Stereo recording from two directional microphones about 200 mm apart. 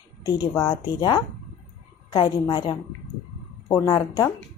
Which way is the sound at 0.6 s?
20° left (ahead or behind).